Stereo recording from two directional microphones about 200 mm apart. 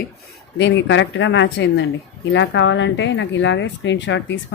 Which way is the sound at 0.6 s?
65° left (ahead or behind).